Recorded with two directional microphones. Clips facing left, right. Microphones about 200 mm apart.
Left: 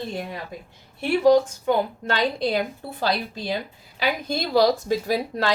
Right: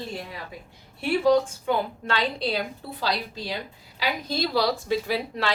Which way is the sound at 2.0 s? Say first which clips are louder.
Left 3 dB; 50° left (ahead or behind).